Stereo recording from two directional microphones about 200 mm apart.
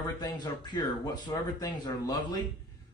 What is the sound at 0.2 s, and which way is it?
Speech, 20° left (ahead or behind).